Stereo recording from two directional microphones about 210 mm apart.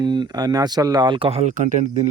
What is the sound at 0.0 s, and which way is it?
Speech, 20° right (ahead or behind).